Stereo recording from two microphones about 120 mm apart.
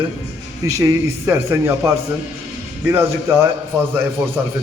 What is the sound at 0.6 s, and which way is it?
Speech, 30° right (ahead or behind).